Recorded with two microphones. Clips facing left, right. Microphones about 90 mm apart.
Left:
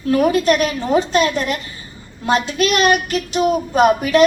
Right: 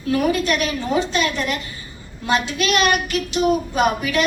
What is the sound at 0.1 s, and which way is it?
A woman's voice, 40° left (ahead or behind).